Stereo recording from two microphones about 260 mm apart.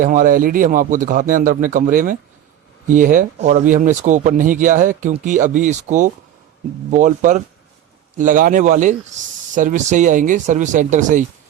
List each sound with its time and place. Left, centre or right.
0.0 s speech: right